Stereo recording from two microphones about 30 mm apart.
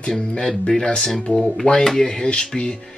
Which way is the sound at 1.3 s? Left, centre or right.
Left.